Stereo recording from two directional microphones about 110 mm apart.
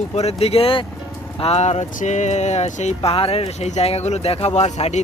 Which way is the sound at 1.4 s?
80° left.